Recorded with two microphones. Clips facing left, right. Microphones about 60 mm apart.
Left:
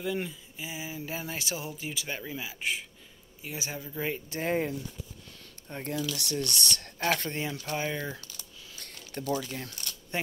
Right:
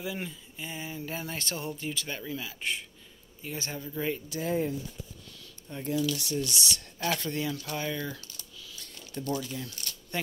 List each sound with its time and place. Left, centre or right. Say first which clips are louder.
0.0 s speech: left 4 dB; centre
4.3 s speech: left 2 dB; left
5.4 s a sound: even; left
6.1 s speech: even; left
8.6 s a sound: left 1 dB; left
9.5 s speech: even; left
10.1 s speech: left 1 dB; left